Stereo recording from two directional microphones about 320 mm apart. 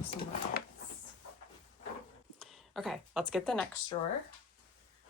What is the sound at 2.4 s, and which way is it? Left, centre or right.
Speech, centre.